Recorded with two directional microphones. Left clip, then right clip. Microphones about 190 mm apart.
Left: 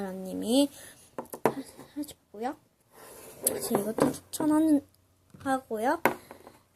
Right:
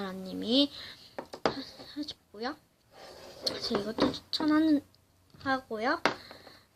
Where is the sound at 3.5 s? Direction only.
15° left (ahead or behind).